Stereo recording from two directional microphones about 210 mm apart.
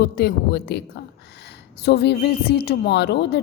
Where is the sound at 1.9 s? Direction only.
50° left (ahead or behind).